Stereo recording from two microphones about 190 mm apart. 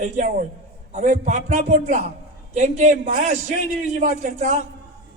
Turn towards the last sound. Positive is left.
turn(degrees=-35)  # may be behind; listen again after turning